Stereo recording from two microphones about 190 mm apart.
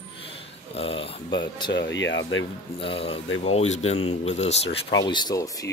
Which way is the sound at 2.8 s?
30° left (ahead or behind).